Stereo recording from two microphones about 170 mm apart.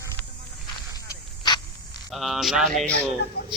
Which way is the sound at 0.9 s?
25° left (ahead or behind).